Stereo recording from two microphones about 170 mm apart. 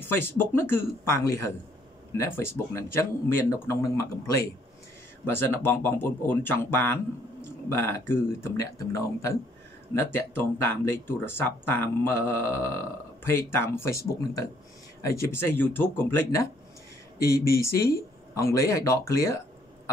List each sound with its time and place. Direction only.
0.1 s speech: 15° left (ahead or behind)
17.5 s speech: 15° left (ahead or behind)